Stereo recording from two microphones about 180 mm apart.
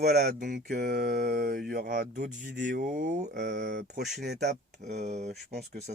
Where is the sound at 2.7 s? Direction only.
45° right (ahead or behind).